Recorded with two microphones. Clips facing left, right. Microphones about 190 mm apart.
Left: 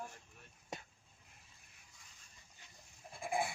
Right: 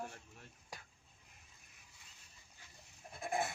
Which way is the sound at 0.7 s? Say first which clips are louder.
Left 6 dB; 25° left (ahead or behind).